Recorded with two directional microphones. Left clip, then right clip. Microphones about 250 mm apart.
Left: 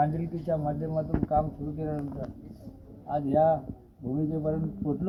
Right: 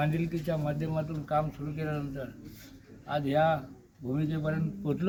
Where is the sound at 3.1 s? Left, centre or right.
Right.